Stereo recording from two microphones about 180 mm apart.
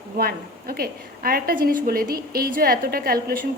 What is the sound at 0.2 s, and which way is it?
A woman's voice, 55° right (ahead or behind).